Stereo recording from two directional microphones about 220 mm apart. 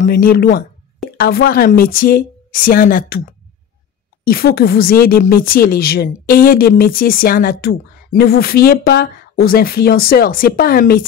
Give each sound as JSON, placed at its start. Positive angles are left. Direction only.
{"t": 0.0, "sound": "a woman's voice", "side_deg": 40}
{"t": 4.2, "sound": "a woman's voice", "side_deg": 40}